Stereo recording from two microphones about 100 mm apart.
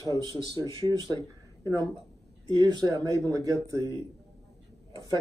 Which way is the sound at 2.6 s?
45° right (ahead or behind).